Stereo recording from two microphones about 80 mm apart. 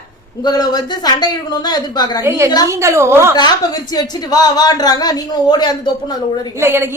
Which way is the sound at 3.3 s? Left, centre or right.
Left.